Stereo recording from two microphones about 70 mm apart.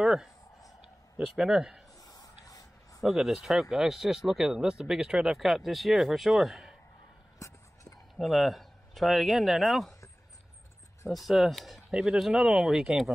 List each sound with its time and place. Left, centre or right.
0.0 s speech: centre
1.3 s a man's voice: centre
2.0 s a sound: left
3.0 s speech: centre
7.3 s a sound: left
8.2 s speech: centre
11.1 s speech: centre